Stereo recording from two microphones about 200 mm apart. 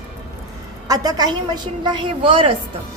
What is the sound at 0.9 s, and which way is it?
A woman's voice, 20° right (ahead or behind).